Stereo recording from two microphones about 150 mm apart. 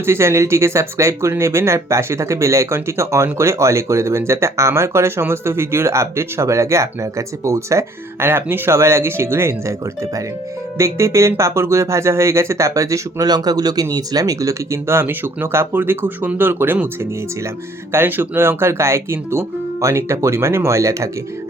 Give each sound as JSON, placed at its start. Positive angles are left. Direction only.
{"t": 0.0, "sound": "speech", "side_deg": -15}